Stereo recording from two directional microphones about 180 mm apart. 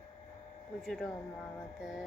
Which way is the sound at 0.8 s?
Centre (ahead or behind).